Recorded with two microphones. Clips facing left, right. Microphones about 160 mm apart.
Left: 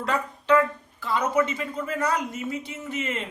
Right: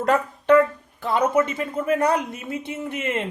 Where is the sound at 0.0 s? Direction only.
50° right (ahead or behind).